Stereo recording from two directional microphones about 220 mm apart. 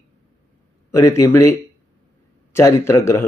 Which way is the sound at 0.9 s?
15° left (ahead or behind).